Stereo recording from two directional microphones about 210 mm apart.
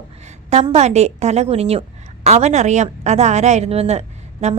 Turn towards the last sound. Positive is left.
turn(degrees=-30)  # may be behind; listen again after turning